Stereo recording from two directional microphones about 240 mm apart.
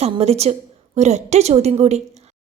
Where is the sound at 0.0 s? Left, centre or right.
Right.